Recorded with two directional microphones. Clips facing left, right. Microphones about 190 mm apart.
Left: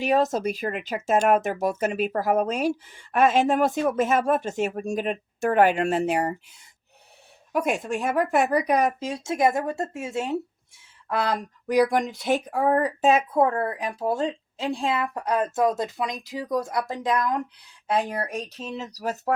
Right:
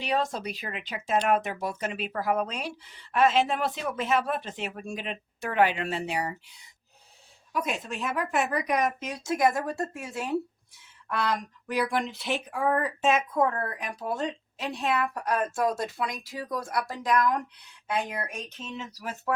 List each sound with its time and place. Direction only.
0.0 s speech: 45° left (ahead or behind); by 17.4 s 25° left (ahead or behind)
17.8 s speech: 35° left (ahead or behind)